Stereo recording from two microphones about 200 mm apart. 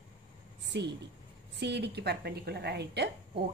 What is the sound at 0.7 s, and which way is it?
A woman's voice, 60° right (ahead or behind).